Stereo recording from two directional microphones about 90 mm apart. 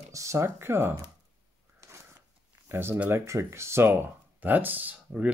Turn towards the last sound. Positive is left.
turn(degrees=-15)  # may be behind; listen again after turning